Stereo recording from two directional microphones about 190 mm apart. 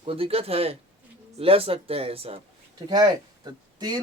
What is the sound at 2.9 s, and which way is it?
Speech, 20° right (ahead or behind).